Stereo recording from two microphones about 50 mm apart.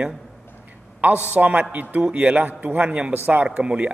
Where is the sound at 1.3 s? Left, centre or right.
Right.